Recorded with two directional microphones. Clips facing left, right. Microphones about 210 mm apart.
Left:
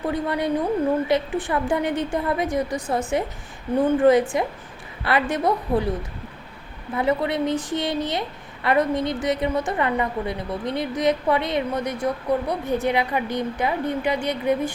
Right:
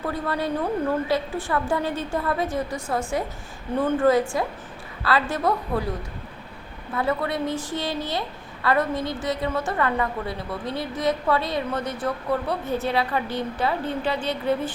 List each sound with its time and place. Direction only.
0.0 s a woman's voice: 20° left (ahead or behind)
4.3 s a woman's voice: 20° left (ahead or behind)
6.9 s a woman's voice: 20° left (ahead or behind)